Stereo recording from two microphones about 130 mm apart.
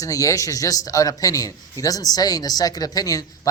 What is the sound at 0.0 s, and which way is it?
A man's voice, 25° left (ahead or behind).